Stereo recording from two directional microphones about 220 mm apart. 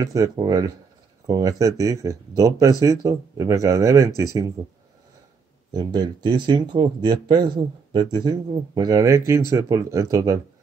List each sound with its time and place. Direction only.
0.0 s speech: 15° right (ahead or behind)
5.7 s speech: 20° right (ahead or behind)